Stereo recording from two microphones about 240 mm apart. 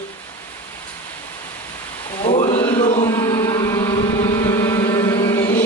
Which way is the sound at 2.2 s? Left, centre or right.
Left.